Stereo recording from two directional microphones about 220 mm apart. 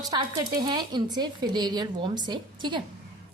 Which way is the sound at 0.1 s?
15° right (ahead or behind).